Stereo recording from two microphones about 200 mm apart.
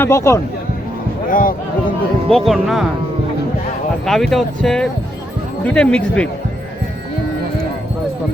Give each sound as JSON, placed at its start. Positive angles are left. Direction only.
{"t": 0.0, "sound": "speech", "side_deg": 15}
{"t": 1.3, "sound": "speech", "side_deg": 45}
{"t": 2.3, "sound": "speech", "side_deg": 0}
{"t": 4.0, "sound": "speech", "side_deg": 0}